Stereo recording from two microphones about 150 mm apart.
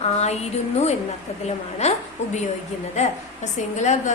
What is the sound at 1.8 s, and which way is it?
A woman's voice, 45° left (ahead or behind).